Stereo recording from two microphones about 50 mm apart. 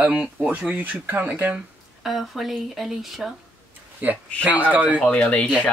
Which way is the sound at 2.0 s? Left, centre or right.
Centre.